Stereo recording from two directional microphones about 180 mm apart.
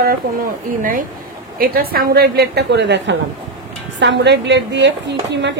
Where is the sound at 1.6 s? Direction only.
55° right (ahead or behind).